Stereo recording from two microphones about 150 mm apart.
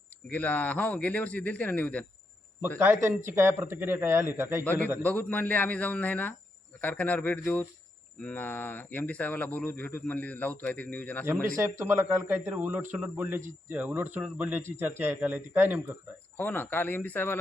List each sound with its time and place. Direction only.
0.3 s speech: 10° left (ahead or behind)
2.7 s speech: 10° right (ahead or behind)
4.6 s speech: 10° left (ahead or behind)
11.5 s speech: 15° right (ahead or behind)
16.4 s speech: 15° left (ahead or behind)